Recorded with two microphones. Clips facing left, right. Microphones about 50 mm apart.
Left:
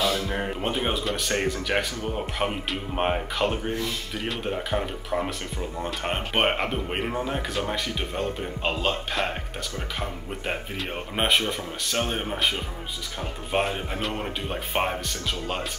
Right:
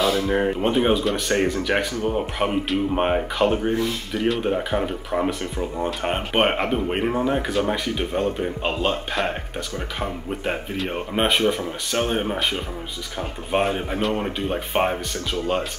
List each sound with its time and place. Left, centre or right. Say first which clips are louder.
0.0 s music: right 5 dB; right
0.4 s speech: right 7 dB; centre